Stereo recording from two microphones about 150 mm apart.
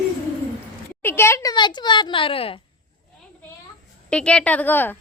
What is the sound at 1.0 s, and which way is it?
A woman's voice, 15° left (ahead or behind).